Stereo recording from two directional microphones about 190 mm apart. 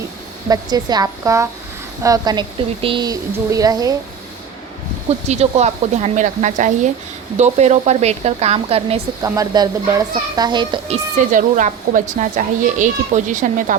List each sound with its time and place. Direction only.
0.4 s speech: 20° right (ahead or behind)
5.3 s a woman's voice: 35° right (ahead or behind)
9.2 s a woman's voice: 20° right (ahead or behind); by 13.7 s 40° right (ahead or behind)